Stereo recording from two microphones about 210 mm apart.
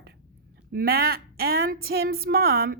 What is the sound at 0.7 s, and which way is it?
Speech, 45° right (ahead or behind).